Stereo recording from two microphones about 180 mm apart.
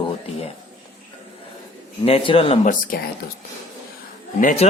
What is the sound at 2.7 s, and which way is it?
Speech, 55° left (ahead or behind).